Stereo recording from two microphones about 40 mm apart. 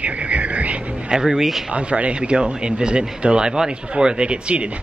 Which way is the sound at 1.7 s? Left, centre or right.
Right.